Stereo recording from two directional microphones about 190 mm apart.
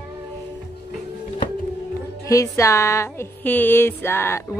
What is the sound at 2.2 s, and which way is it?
Speech, 15° left (ahead or behind).